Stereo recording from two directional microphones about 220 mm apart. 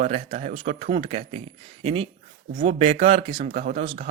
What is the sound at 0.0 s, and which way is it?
Speech, 30° right (ahead or behind).